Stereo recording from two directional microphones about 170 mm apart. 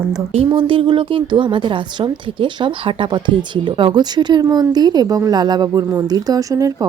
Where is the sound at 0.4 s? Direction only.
30° right (ahead or behind).